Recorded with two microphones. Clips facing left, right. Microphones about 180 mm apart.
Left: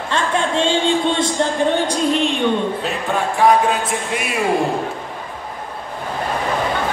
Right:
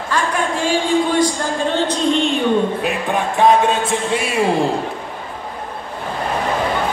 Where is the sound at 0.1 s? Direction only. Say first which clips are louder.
Left 1 dB; 25° left (ahead or behind).